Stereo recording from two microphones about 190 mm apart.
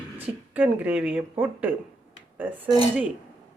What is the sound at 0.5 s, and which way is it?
A woman's voice, 10° right (ahead or behind).